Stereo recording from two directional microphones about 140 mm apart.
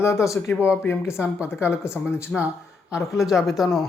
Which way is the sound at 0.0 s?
20° left (ahead or behind).